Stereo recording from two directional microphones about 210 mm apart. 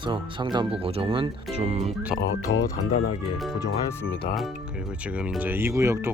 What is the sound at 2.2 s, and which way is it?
Speech, 60° left (ahead or behind).